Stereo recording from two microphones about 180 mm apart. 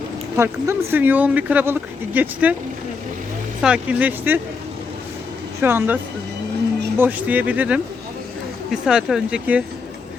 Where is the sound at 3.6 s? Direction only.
5° right (ahead or behind).